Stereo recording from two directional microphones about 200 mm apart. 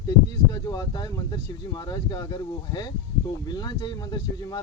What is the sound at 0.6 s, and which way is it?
Speech, 20° left (ahead or behind).